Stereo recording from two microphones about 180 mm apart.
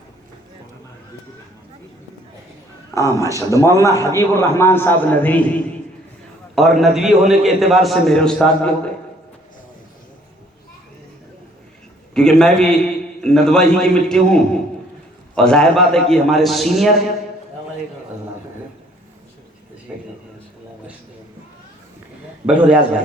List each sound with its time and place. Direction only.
2.9 s a man's voice: 20° left (ahead or behind)
6.6 s a man's voice: centre (ahead or behind)
12.1 s a man's voice: 5° left (ahead or behind)
22.4 s a man's voice: 5° right (ahead or behind)